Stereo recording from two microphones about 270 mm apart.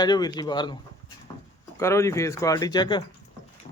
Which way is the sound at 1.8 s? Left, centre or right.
Centre.